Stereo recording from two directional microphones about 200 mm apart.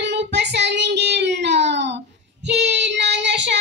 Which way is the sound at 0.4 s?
60° right (ahead or behind).